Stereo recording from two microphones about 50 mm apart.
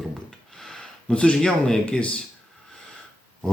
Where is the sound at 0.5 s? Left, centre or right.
Centre.